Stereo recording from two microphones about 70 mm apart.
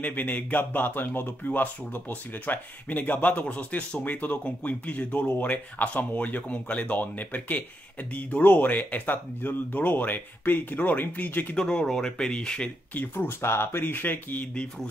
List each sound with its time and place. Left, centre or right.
0.0 s speech: left
11.5 s speech: centre; by 14.5 s left